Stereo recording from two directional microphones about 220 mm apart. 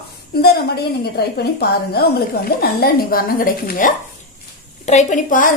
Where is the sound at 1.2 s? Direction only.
45° left (ahead or behind).